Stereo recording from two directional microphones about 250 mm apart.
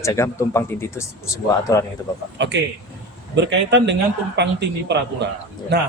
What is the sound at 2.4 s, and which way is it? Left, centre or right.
Speech, right.